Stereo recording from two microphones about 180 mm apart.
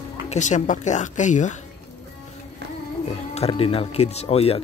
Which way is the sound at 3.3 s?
35° left (ahead or behind).